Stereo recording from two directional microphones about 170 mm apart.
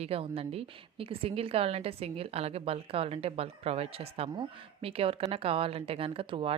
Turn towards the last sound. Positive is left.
turn(degrees=-30)  # may be behind; listen again after turning